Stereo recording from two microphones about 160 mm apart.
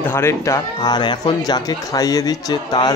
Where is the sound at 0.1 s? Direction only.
15° left (ahead or behind).